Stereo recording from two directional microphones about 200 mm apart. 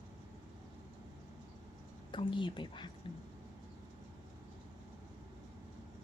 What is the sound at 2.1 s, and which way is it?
Speech, 25° left (ahead or behind).